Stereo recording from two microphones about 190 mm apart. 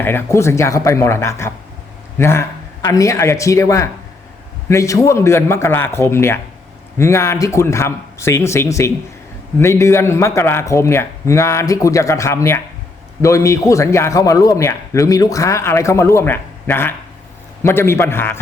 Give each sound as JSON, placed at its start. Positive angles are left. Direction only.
{"t": 0.0, "sound": "a man's voice", "side_deg": 10}